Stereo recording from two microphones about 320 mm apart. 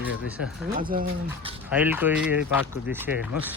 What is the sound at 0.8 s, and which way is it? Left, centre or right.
Speech, right.